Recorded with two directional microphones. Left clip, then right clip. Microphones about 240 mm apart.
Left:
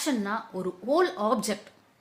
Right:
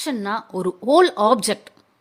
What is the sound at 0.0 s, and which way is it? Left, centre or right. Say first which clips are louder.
A woman's voice: right 5 dB; right.